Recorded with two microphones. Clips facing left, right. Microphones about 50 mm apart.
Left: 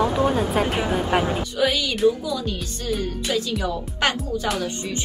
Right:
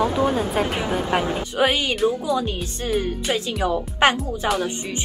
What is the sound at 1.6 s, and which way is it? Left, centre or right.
Speech, right.